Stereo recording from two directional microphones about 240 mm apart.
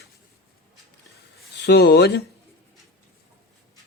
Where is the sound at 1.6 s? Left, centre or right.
Left.